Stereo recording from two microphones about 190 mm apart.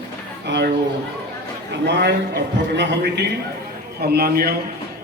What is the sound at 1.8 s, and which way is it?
Speech, 60° right (ahead or behind).